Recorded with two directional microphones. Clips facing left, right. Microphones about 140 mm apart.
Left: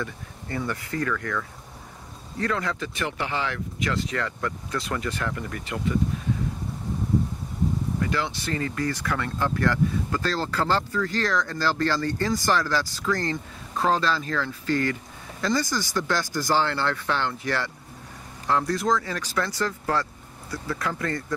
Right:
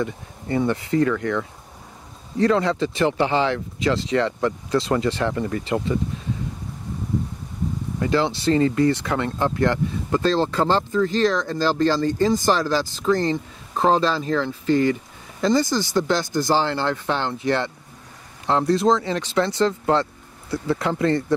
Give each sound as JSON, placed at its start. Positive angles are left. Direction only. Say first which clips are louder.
{"t": 0.0, "sound": "speech", "louder": "right 7 dB", "side_deg": -25}
{"t": 8.0, "sound": "speech", "louder": "right 12 dB", "side_deg": -30}